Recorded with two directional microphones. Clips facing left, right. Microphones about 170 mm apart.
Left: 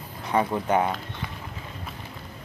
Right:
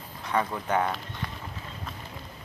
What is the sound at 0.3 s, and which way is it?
Speech, 15° left (ahead or behind).